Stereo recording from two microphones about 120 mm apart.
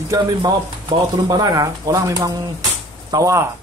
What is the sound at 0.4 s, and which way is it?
Speech, 35° right (ahead or behind).